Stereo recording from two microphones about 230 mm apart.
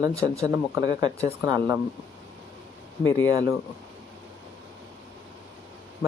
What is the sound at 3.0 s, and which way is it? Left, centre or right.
Speech, centre.